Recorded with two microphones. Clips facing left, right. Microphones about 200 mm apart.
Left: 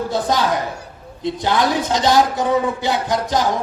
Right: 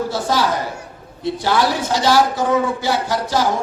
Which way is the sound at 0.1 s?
20° left (ahead or behind).